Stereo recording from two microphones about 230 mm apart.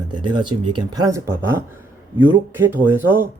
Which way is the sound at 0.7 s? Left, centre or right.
Centre.